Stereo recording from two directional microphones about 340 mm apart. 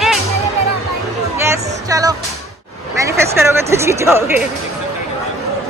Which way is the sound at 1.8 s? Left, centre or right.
Centre.